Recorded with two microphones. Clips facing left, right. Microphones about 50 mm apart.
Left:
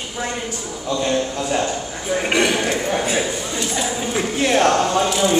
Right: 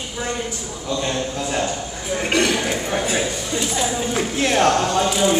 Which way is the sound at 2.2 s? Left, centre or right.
Centre.